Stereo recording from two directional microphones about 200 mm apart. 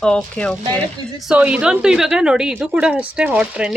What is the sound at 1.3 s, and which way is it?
A woman's voice, 5° right (ahead or behind).